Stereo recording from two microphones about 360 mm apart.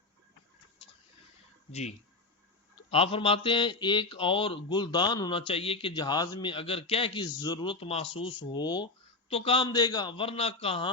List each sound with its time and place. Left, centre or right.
1.7 s speech: centre